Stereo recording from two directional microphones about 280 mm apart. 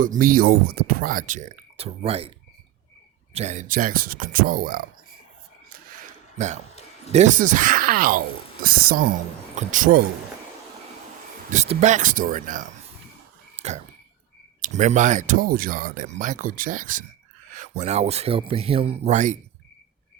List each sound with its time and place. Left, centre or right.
0.0 s speech: right
3.3 s speech: right
6.3 s speech: right
11.5 s speech: right
14.6 s speech: right